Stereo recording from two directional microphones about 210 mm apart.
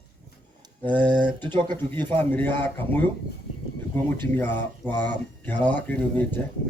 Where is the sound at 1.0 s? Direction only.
20° right (ahead or behind).